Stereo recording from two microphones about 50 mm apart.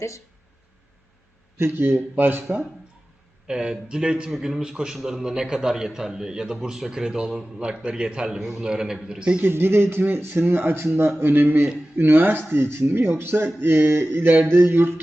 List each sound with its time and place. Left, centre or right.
1.5 s speech: right
2.1 s speech: right
3.4 s a man's voice: centre
4.3 s a man's voice: centre
9.4 s speech: right